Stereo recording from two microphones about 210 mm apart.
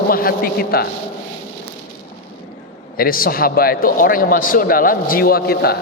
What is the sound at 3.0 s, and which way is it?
A man's voice, 45° left (ahead or behind).